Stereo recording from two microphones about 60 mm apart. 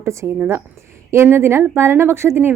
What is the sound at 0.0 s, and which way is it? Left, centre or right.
Speech, right.